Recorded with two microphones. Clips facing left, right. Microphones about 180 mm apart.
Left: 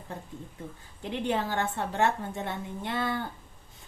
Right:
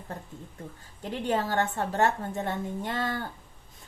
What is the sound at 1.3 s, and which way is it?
A woman's voice, 40° right (ahead or behind).